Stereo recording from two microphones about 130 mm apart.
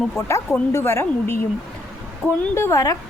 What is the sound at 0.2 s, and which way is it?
A woman's voice, 20° left (ahead or behind).